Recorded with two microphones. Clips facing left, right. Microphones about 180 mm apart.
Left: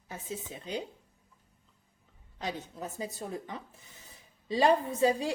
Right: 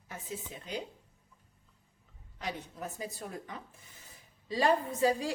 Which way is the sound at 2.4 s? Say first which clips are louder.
Left 2 dB; 25° left (ahead or behind).